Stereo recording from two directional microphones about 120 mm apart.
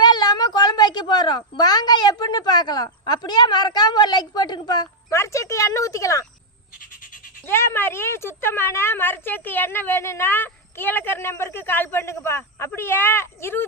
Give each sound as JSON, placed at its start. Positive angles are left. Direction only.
{"t": 0.0, "sound": "a woman's voice", "side_deg": 35}
{"t": 5.1, "sound": "a woman's voice", "side_deg": 25}
{"t": 7.4, "sound": "a woman's voice", "side_deg": 20}